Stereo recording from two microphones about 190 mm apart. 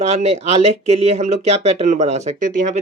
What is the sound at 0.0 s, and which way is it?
Speech, 35° right (ahead or behind).